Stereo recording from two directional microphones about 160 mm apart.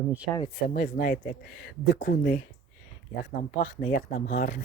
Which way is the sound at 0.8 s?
65° left (ahead or behind).